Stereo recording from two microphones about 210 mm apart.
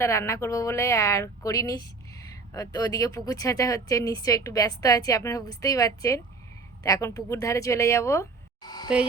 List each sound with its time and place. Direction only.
0.0 s a woman's voice: 15° left (ahead or behind)